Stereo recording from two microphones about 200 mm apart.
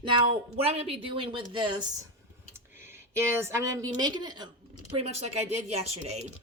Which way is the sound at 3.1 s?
15° right (ahead or behind).